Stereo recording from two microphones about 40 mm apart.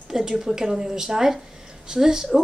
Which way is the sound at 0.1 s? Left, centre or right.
Centre.